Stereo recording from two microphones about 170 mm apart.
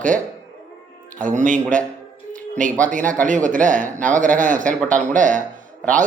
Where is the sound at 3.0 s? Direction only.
10° left (ahead or behind).